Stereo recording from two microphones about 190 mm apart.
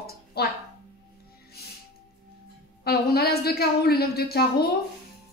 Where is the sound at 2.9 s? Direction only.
55° left (ahead or behind).